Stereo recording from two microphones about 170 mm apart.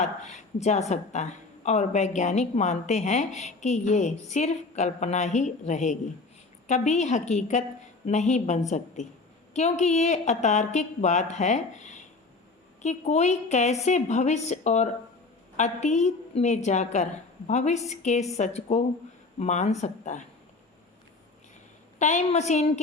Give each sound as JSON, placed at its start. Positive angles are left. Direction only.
{"t": 0.0, "sound": "a woman's voice", "side_deg": 45}
{"t": 21.9, "sound": "a woman's voice", "side_deg": 45}